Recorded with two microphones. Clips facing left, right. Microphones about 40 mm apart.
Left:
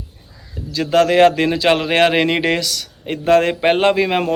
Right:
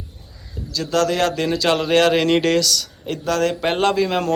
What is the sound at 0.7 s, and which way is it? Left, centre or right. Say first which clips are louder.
Speech: left 5 dB; left.